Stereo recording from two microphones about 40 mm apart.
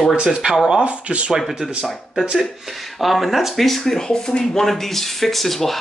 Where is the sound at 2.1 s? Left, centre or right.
Centre.